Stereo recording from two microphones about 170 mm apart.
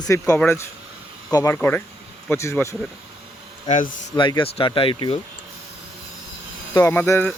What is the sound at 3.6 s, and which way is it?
Speech, 50° left (ahead or behind).